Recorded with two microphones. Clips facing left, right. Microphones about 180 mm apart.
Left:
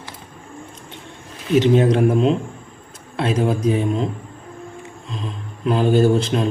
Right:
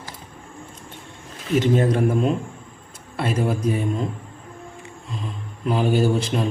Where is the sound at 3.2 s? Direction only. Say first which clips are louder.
Left 4 dB; 5° right (ahead or behind).